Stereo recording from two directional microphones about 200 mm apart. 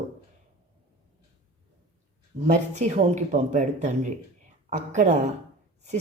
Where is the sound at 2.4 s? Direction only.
35° right (ahead or behind).